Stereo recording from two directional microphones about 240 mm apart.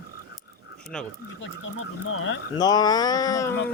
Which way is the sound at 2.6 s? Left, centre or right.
Centre.